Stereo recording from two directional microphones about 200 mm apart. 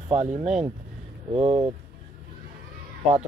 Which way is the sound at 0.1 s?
30° right (ahead or behind).